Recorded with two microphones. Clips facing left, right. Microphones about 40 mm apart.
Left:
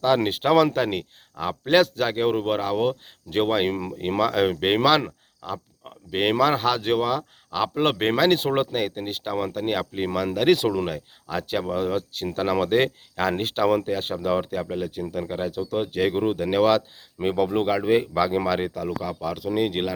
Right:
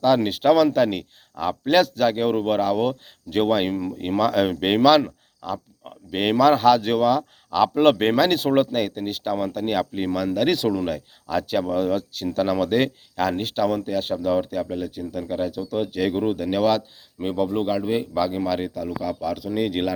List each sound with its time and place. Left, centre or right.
0.0 s speech: left
4.8 s speech: left
5.4 s speech: centre
10.1 s speech: left
10.8 s speech: centre
12.1 s speech: left
19.0 s speech: left